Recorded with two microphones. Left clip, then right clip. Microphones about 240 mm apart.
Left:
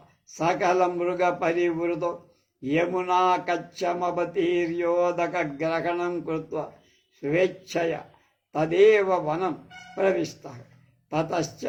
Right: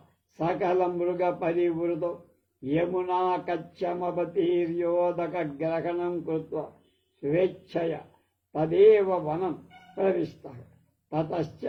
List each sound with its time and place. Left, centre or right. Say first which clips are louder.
0.3 s a man's voice: left 4 dB; left